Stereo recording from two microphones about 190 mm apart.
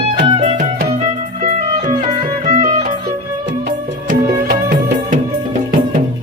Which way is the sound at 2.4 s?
40° right (ahead or behind).